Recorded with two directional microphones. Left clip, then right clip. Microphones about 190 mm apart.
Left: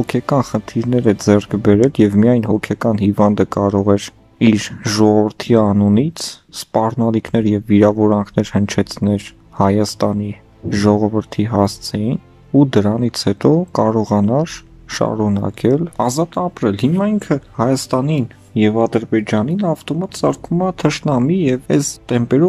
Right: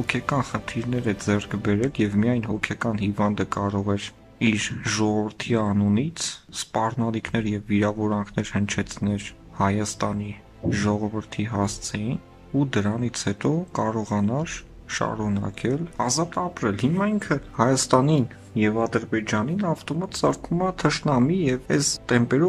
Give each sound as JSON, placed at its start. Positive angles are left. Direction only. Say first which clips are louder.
{"t": 0.0, "sound": "speech", "louder": "left 8 dB", "side_deg": 30}